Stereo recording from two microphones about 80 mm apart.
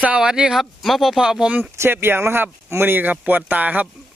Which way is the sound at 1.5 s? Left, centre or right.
Right.